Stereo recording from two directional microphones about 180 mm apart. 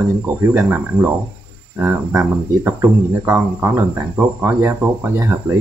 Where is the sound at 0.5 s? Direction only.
15° right (ahead or behind).